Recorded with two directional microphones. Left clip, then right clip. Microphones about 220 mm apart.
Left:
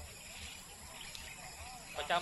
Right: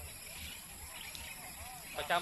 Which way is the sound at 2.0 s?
10° right (ahead or behind).